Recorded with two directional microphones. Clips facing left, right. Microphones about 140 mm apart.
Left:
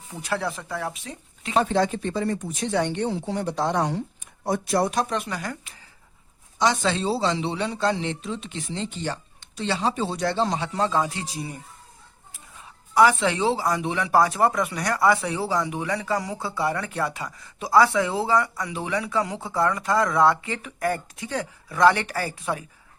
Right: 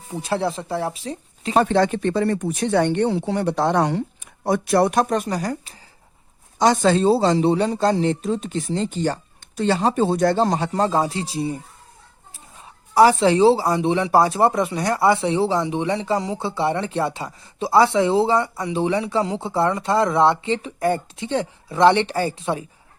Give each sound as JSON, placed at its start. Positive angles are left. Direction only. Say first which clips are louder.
{"t": 0.1, "sound": "speech", "louder": "right 5 dB", "side_deg": -30}
{"t": 1.5, "sound": "speech", "louder": "right 4 dB", "side_deg": -65}
{"t": 12.9, "sound": "speech", "louder": "right 5 dB", "side_deg": -35}